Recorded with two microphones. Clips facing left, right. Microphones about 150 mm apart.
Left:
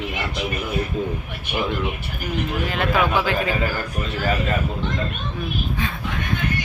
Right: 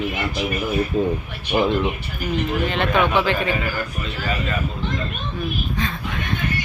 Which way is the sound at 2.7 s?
5° left (ahead or behind).